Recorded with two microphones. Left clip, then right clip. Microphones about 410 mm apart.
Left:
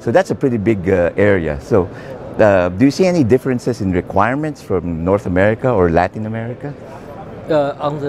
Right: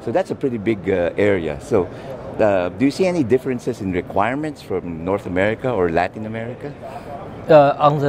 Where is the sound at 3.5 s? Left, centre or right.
Left.